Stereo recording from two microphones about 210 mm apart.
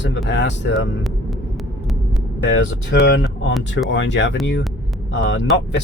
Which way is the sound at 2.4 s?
60° left (ahead or behind).